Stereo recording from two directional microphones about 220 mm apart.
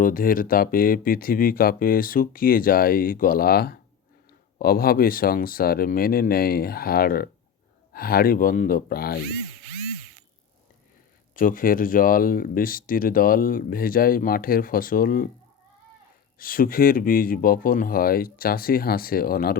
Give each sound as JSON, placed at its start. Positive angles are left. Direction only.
{"t": 0.0, "sound": "speech", "side_deg": 40}
{"t": 11.3, "sound": "speech", "side_deg": 40}
{"t": 16.4, "sound": "speech", "side_deg": 40}